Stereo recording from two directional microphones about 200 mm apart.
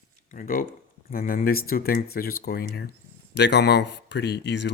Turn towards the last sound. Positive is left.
turn(degrees=60)  # may be behind; listen again after turning